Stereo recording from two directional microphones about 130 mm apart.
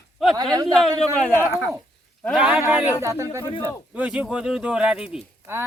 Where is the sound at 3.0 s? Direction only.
20° right (ahead or behind).